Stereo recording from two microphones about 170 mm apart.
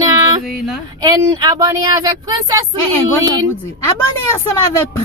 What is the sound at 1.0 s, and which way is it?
Speech, 25° right (ahead or behind).